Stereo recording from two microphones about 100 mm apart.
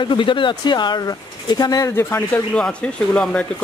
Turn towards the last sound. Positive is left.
turn(degrees=10)  # may be behind; listen again after turning